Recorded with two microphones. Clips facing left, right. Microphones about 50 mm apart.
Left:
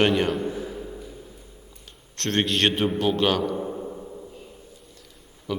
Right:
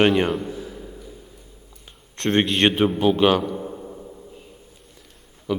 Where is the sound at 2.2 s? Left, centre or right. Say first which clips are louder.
Right 4 dB; centre.